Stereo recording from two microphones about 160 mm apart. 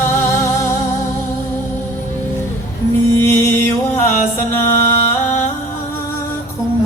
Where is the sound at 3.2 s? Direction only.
15° left (ahead or behind).